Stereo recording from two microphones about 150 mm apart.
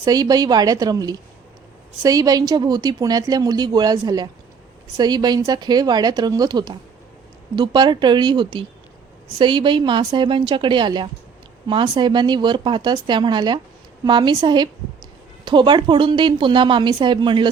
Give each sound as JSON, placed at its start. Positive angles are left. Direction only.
{"t": 0.0, "sound": "a woman's voice", "side_deg": -25}